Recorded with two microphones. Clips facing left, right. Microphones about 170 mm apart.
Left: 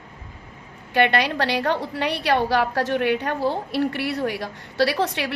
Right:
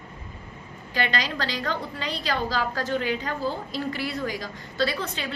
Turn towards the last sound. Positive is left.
turn(degrees=75)  # may be behind; listen again after turning